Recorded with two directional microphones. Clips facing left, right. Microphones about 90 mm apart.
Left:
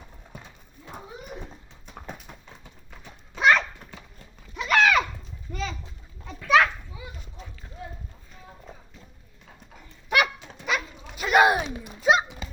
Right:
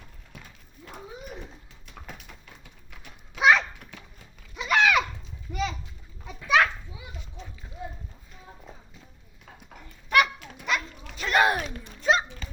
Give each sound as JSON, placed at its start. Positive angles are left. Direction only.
{"t": 1.9, "sound": "clip-clop", "side_deg": 25}
{"t": 3.0, "sound": "cat", "side_deg": -10}
{"t": 4.5, "sound": "horse", "side_deg": -10}
{"t": 5.5, "sound": "a sound", "side_deg": -5}
{"t": 6.2, "sound": "children playing", "side_deg": -5}
{"t": 7.8, "sound": "run", "side_deg": -15}
{"t": 10.4, "sound": "dog", "side_deg": 0}